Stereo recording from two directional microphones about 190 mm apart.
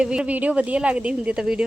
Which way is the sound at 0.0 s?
5° right (ahead or behind).